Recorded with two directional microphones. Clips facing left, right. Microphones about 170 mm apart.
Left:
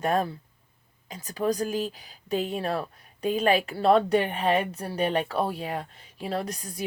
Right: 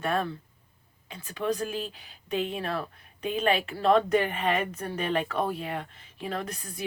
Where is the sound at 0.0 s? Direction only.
40° left (ahead or behind).